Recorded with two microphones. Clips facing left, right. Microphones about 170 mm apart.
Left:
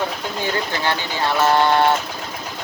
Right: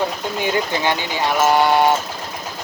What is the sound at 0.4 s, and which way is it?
Speech, 15° right (ahead or behind).